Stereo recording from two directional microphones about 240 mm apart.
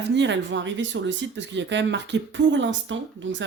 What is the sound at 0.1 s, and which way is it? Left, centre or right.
Speech, right.